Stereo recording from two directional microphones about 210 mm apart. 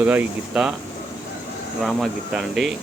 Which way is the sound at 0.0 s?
5° right (ahead or behind).